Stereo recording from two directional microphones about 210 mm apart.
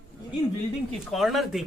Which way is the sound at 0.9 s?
Centre (ahead or behind).